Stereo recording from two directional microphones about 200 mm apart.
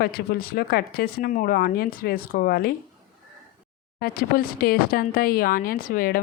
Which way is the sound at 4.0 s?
45° left (ahead or behind).